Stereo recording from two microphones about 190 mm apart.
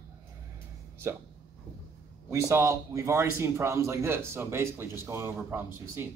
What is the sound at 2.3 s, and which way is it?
A man's voice, 15° right (ahead or behind).